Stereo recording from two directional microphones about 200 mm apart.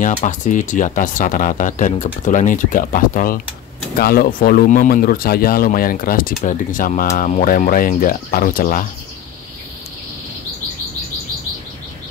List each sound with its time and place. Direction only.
0.0 s speech: 40° left (ahead or behind)